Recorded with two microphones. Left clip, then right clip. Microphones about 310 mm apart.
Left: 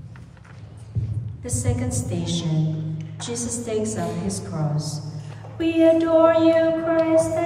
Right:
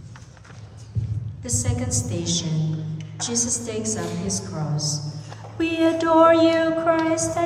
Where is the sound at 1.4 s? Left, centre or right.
Centre.